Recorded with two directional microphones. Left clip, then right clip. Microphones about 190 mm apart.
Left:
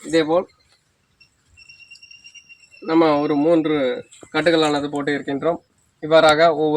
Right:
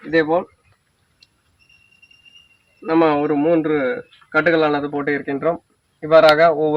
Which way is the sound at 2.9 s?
Centre (ahead or behind).